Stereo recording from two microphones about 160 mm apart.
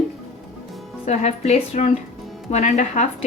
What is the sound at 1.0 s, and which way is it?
A woman's voice, 45° left (ahead or behind).